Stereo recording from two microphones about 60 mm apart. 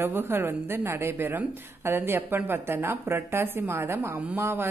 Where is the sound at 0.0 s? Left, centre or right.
Right.